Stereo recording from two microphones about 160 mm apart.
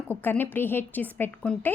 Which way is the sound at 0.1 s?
10° left (ahead or behind).